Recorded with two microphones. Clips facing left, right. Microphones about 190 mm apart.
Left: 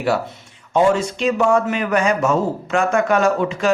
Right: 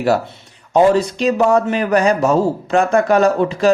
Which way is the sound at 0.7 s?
40° right (ahead or behind).